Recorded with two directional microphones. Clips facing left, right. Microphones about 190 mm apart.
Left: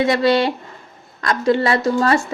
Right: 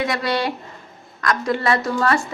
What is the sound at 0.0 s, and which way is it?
A woman's voice, 25° left (ahead or behind).